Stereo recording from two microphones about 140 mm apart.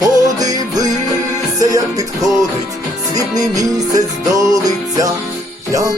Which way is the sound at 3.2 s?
25° right (ahead or behind).